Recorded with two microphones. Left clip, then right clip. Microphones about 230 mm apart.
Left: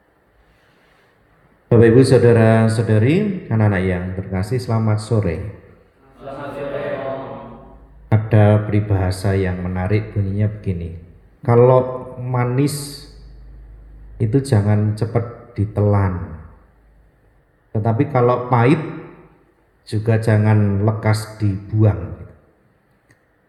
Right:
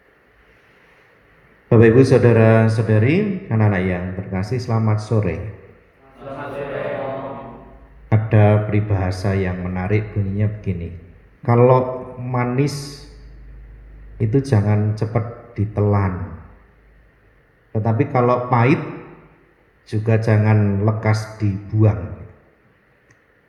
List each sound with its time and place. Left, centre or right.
1.7 s speech: left
8.1 s speech: left
14.2 s speech: left
17.7 s speech: left
19.8 s speech: left